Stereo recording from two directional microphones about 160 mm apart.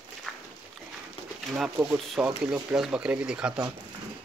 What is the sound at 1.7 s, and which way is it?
Speech, 5° right (ahead or behind).